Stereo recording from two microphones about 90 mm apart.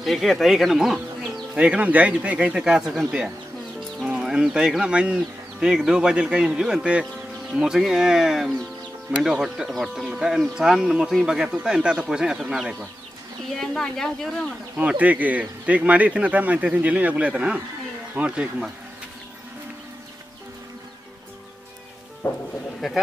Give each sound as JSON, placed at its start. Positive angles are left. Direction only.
{"t": 0.0, "sound": "speech", "side_deg": 0}
{"t": 13.6, "sound": "speech", "side_deg": 5}
{"t": 14.8, "sound": "speech", "side_deg": -15}
{"t": 22.2, "sound": "speech", "side_deg": 25}
{"t": 22.8, "sound": "speech", "side_deg": 5}